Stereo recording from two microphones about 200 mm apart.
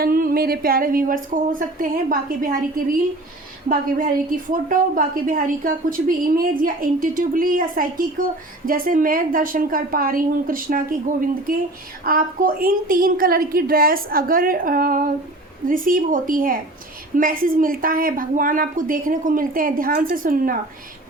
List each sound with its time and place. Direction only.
0.0 s a woman's voice: 45° right (ahead or behind)
12.0 s a woman's voice: 45° right (ahead or behind)